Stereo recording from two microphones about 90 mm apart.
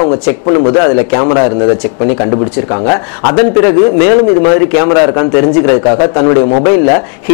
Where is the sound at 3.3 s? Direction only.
15° left (ahead or behind).